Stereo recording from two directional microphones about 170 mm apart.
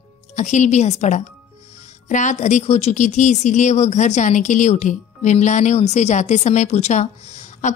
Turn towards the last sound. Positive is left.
turn(degrees=45)  # may be behind; listen again after turning